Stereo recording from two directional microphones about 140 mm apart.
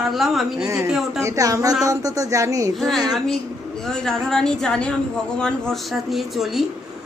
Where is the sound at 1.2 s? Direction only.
20° right (ahead or behind).